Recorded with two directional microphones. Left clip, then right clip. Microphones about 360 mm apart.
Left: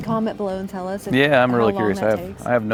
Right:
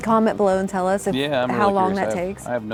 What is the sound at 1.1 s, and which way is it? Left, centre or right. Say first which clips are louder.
Speech: left 5 dB; left.